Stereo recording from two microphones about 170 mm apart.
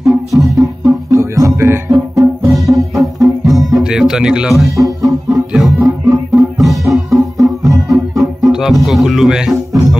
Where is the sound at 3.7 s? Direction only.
Centre (ahead or behind).